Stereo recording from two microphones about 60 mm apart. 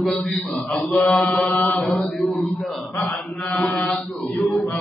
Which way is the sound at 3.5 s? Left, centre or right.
Left.